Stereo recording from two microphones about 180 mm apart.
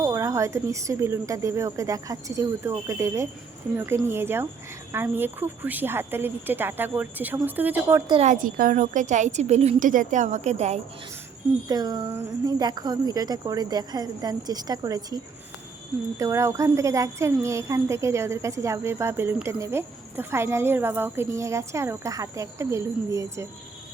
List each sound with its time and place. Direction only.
0.0 s speech: 15° right (ahead or behind)
8.1 s a woman's voice: 40° right (ahead or behind)
11.7 s speech: 20° right (ahead or behind)